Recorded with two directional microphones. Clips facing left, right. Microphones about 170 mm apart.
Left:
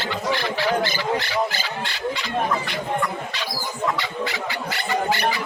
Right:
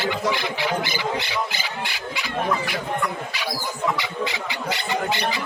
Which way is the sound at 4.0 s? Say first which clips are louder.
Even; 20° right (ahead or behind).